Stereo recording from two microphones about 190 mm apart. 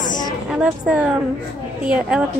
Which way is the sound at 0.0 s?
45° left (ahead or behind).